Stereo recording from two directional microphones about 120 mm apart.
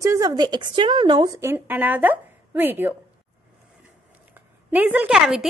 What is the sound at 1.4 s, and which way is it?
A woman's voice, 15° right (ahead or behind).